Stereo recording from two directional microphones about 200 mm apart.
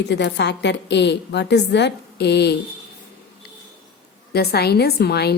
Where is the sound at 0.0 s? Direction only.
60° left (ahead or behind).